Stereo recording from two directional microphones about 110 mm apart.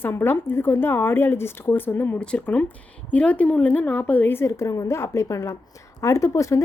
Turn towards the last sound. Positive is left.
turn(degrees=30)  # may be behind; listen again after turning